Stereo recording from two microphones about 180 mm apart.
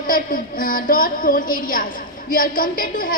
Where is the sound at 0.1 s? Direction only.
50° left (ahead or behind).